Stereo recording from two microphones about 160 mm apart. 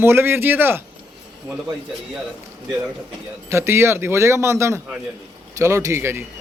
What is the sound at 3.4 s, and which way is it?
A man's voice, 15° right (ahead or behind).